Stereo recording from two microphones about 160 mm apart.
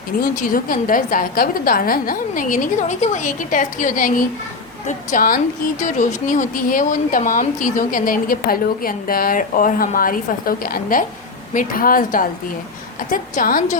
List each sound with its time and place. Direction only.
0.2 s a woman's voice: 55° left (ahead or behind)